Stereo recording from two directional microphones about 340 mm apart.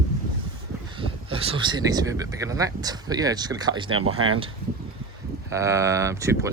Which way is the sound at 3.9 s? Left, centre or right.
Right.